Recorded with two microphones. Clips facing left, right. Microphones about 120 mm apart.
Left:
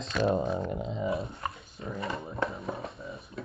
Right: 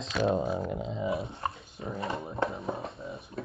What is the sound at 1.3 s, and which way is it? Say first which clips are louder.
Dog: right 2 dB; 25° right (ahead or behind).